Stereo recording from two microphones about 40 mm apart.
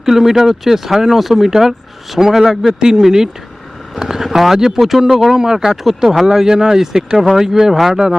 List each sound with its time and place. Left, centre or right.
0.0 s speech: centre
7.7 s a man's voice: centre